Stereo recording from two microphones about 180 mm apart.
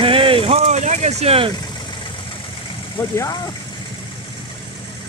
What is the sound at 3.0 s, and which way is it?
Speech, 20° left (ahead or behind).